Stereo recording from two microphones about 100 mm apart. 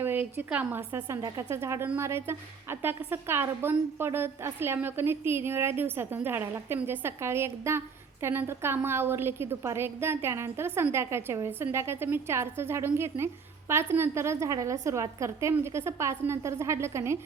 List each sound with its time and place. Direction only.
0.0 s a woman's voice: 20° right (ahead or behind)